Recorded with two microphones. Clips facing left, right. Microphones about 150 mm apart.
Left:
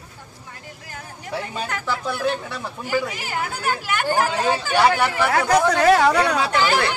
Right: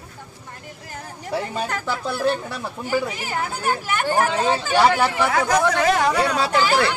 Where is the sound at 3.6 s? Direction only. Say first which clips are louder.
Right 1 dB; centre (ahead or behind).